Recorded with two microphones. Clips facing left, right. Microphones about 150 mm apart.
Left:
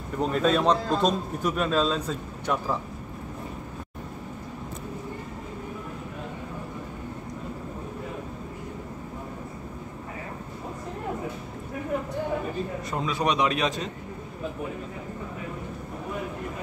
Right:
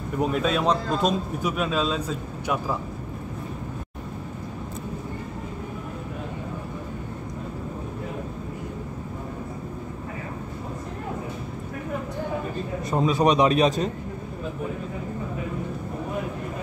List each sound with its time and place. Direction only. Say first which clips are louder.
0.2 s a man's voice: left 1 dB; 5° right (ahead or behind)
12.9 s a man's voice: right 6 dB; 35° right (ahead or behind)